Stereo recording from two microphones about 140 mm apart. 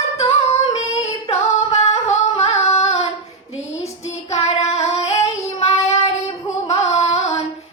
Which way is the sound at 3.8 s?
50° left (ahead or behind).